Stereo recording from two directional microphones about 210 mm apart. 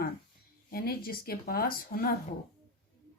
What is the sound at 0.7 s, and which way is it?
A woman's voice, 45° left (ahead or behind).